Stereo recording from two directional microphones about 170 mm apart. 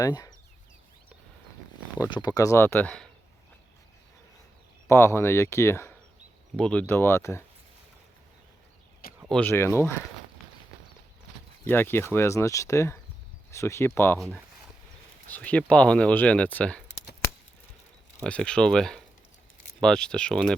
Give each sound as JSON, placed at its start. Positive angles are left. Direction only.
{"t": 0.0, "sound": "speech", "side_deg": 20}
{"t": 2.0, "sound": "speech", "side_deg": 25}
{"t": 4.9, "sound": "speech", "side_deg": 15}
{"t": 9.3, "sound": "speech", "side_deg": 10}
{"t": 11.6, "sound": "speech", "side_deg": 10}
{"t": 14.2, "sound": "speech", "side_deg": 0}
{"t": 18.2, "sound": "speech", "side_deg": 5}